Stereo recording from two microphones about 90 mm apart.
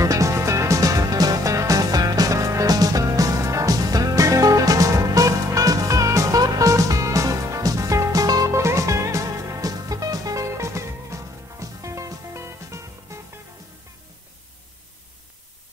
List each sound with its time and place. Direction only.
0.0 s music: 35° right (ahead or behind)